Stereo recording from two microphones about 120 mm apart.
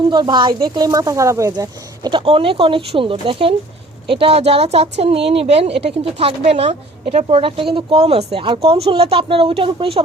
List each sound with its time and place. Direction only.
0.1 s speech: 40° right (ahead or behind)
2.2 s speech: 50° right (ahead or behind)